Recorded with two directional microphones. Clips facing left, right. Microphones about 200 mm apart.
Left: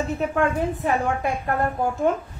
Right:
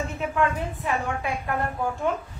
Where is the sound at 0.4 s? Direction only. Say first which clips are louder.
Left 2 dB; 45° left (ahead or behind).